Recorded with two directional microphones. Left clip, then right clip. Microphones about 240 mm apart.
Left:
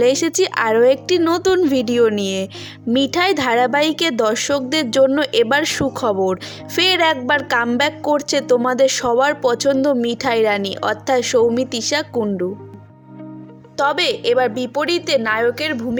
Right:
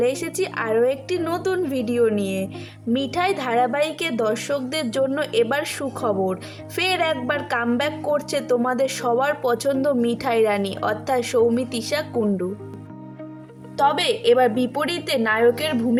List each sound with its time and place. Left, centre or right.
0.0 s speech: right
13.7 s a woman's voice: right